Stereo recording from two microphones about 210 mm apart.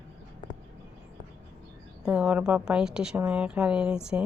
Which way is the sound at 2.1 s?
5° right (ahead or behind).